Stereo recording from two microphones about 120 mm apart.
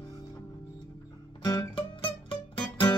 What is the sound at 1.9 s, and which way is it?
Music, 45° left (ahead or behind).